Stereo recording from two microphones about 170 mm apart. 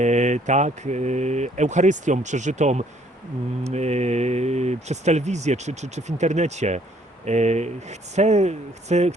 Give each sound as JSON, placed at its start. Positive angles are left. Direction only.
{"t": 0.0, "sound": "speech", "side_deg": -45}